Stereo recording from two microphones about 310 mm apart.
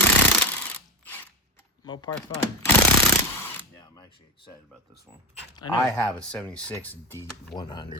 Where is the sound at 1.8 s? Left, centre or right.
Centre.